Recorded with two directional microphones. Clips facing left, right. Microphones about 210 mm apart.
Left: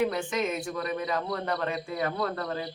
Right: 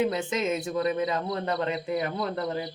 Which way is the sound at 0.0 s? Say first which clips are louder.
Right 1 dB; 20° right (ahead or behind).